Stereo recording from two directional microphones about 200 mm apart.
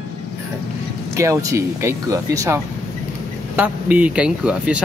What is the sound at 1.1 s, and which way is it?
Speech, 15° right (ahead or behind).